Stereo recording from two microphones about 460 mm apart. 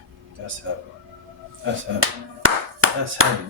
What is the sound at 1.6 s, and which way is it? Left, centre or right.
Clapping, right.